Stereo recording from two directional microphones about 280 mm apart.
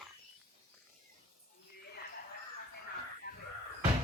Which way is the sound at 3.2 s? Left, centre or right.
Left.